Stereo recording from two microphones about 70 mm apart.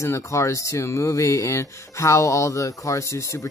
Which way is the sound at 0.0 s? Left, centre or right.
Left.